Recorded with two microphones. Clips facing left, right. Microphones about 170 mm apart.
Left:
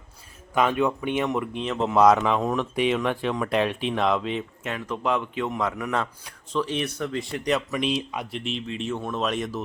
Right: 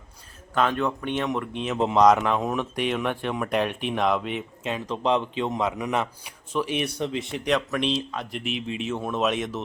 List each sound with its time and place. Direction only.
0.5 s speech: 10° left (ahead or behind)
4.6 s a man's voice: 25° right (ahead or behind)
7.4 s speech: centre (ahead or behind)
8.3 s speech: 5° right (ahead or behind)